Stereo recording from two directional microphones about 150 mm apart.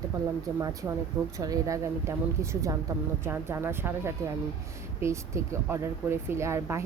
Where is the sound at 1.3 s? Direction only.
20° right (ahead or behind).